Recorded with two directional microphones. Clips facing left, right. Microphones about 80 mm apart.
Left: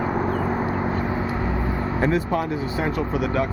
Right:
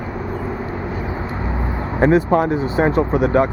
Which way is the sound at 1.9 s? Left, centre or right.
Right.